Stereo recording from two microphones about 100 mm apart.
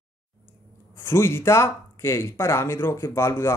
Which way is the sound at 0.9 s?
25° left (ahead or behind).